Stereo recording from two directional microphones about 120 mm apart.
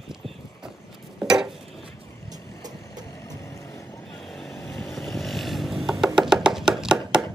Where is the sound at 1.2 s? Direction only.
5° right (ahead or behind).